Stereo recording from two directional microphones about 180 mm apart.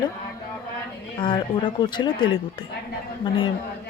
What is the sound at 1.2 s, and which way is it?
Speech, 25° left (ahead or behind).